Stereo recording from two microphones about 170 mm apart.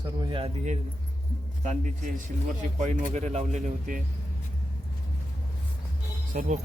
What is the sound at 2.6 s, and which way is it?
Speech, 45° right (ahead or behind).